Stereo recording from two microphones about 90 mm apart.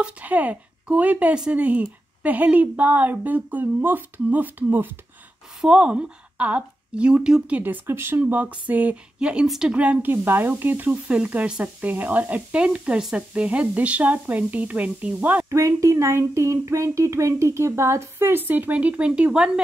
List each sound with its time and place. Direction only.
0.0 s a woman's voice: 15° right (ahead or behind)
5.6 s a woman's voice: 10° right (ahead or behind)
15.5 s speech: 35° right (ahead or behind); by 19.6 s 10° right (ahead or behind)